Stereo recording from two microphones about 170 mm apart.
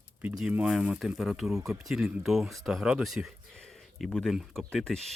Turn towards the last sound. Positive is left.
turn(degrees=5)  # may be behind; listen again after turning